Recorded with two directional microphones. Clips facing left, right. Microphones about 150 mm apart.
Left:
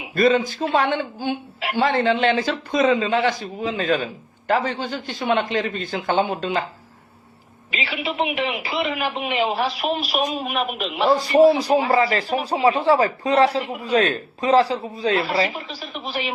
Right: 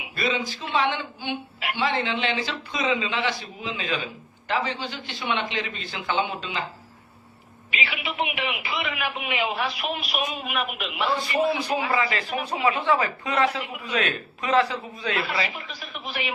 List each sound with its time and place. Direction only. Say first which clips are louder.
0.2 s a woman's voice: left 10 dB; 45° left (ahead or behind)
7.7 s a man's voice: left 4 dB; 35° left (ahead or behind)